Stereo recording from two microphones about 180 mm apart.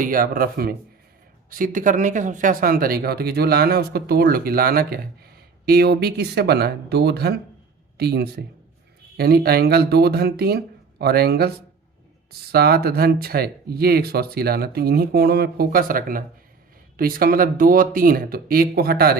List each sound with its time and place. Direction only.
0.0 s speech: 50° right (ahead or behind)